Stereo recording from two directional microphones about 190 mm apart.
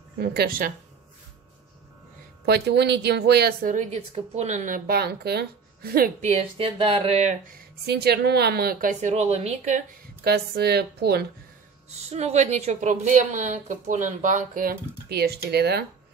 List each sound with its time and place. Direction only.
0.2 s a woman's voice: 55° right (ahead or behind)
2.4 s a woman's voice: 60° right (ahead or behind); by 7.3 s 35° right (ahead or behind)
7.8 s a woman's voice: 60° right (ahead or behind); by 9.8 s 40° right (ahead or behind)
10.2 s a woman's voice: 55° right (ahead or behind)
12.1 s a woman's voice: 35° right (ahead or behind); by 15.8 s 55° right (ahead or behind)